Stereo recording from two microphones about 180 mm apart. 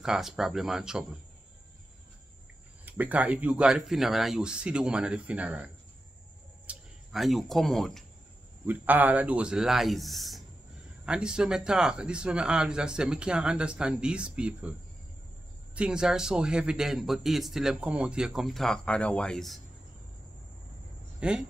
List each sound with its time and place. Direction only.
0.0 s a man's voice: 5° right (ahead or behind)
2.8 s a man's voice: 10° right (ahead or behind)
6.7 s speech: centre (ahead or behind)
8.6 s a man's voice: 10° right (ahead or behind)
21.2 s speech: 5° right (ahead or behind)